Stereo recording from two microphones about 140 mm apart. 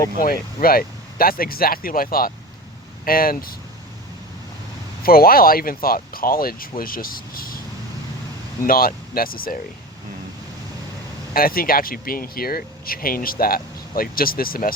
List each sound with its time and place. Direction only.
0.2 s speech: 90° left
5.0 s speech: 90° left
8.6 s speech: 90° left
11.3 s speech: 90° left